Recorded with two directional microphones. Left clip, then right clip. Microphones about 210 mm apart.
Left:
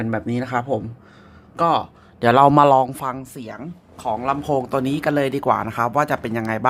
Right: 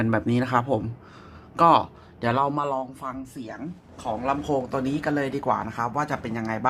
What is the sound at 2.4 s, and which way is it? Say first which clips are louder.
Speech: left 13 dB; 40° left (ahead or behind).